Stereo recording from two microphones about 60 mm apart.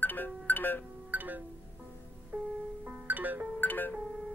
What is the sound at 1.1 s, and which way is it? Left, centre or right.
Music, right.